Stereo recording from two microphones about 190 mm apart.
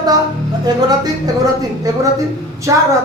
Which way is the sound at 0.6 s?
20° right (ahead or behind).